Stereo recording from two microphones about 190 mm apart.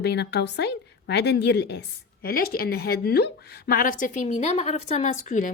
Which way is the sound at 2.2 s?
50° left (ahead or behind).